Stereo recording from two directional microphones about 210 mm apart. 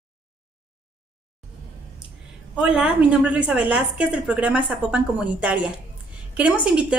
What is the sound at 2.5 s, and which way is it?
A woman's voice, 5° right (ahead or behind).